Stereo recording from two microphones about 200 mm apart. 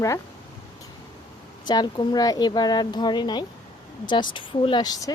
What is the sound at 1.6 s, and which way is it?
A woman's voice, 20° left (ahead or behind).